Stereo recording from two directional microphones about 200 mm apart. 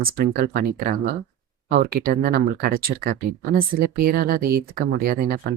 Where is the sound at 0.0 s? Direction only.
45° right (ahead or behind).